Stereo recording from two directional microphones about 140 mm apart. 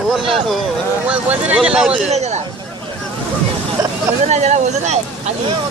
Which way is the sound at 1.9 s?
50° right (ahead or behind).